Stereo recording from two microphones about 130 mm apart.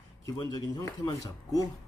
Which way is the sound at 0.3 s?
30° left (ahead or behind).